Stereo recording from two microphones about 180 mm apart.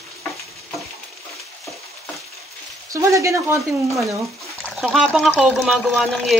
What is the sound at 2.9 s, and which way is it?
Speech, 15° right (ahead or behind).